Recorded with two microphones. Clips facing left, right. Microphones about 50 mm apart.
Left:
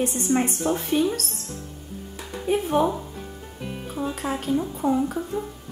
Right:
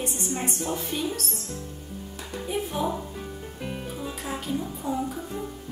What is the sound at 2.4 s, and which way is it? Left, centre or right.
Speech, left.